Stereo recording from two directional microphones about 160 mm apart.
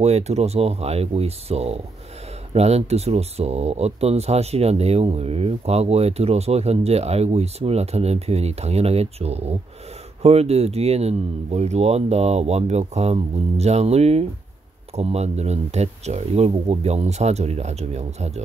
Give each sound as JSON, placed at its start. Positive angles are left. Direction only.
{"t": 0.0, "sound": "speech", "side_deg": -40}